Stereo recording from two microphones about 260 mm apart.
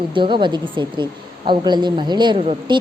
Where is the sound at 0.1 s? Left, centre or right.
Centre.